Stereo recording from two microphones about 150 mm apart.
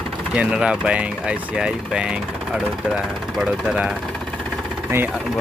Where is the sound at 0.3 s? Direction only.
5° right (ahead or behind).